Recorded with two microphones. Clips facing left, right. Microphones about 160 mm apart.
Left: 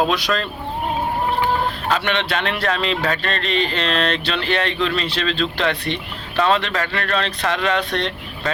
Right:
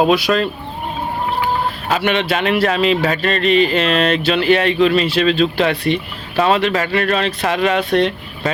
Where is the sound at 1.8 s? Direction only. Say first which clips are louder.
Right 6 dB; 5° right (ahead or behind).